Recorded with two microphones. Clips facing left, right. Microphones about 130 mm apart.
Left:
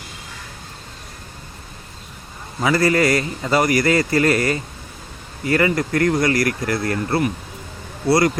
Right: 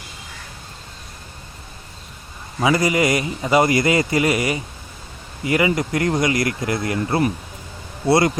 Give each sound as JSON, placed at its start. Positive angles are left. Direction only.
{"t": 2.6, "sound": "a man's voice", "side_deg": -15}